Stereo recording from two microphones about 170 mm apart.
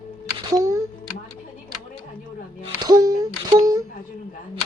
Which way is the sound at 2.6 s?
25° right (ahead or behind).